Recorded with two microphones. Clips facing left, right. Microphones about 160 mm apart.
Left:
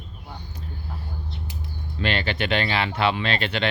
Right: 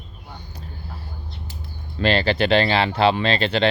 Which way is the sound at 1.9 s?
35° right (ahead or behind).